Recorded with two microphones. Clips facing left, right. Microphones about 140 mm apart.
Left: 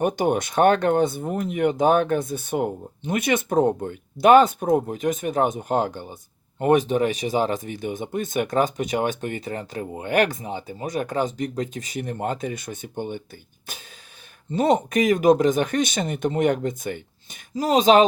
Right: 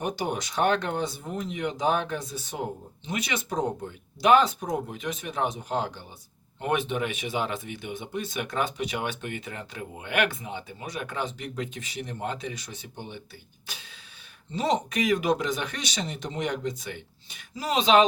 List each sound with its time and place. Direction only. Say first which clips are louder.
0.0 s speech: left 8 dB; 55° left (ahead or behind)